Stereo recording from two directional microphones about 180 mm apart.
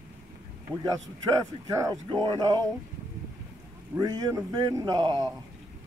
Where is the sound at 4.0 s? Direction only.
20° right (ahead or behind).